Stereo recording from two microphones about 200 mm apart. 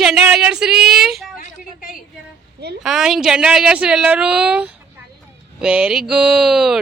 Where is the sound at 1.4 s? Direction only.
45° left (ahead or behind).